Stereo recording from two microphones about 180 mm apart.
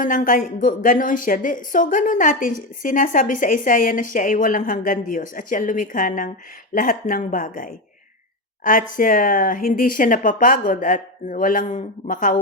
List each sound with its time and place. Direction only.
0.0 s a woman's voice: 45° left (ahead or behind)